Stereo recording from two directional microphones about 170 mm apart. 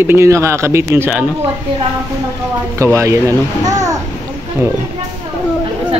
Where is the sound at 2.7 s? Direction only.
15° right (ahead or behind).